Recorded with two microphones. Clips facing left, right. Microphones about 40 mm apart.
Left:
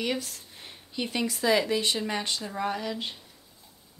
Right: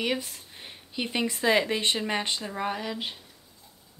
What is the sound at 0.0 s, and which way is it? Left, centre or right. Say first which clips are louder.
Speech: right 1 dB; centre.